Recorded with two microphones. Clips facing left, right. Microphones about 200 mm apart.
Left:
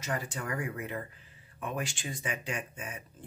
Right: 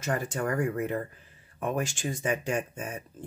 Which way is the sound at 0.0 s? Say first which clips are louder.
Right 6 dB; 50° right (ahead or behind).